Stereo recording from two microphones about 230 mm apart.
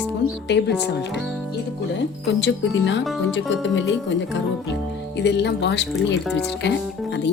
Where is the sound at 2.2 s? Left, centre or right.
Left.